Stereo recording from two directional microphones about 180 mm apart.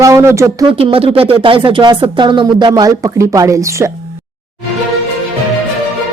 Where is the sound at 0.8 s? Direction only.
30° right (ahead or behind); by 3.9 s 15° right (ahead or behind).